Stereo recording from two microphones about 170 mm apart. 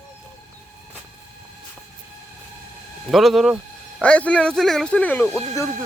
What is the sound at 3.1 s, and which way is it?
Speech, centre (ahead or behind).